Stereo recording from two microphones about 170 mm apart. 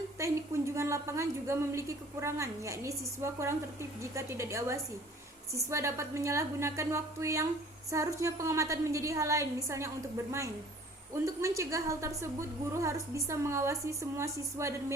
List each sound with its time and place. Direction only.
0.2 s a woman's voice: 15° right (ahead or behind)
11.1 s a woman's voice: 15° right (ahead or behind)